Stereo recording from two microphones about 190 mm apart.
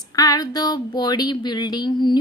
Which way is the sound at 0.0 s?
20° left (ahead or behind).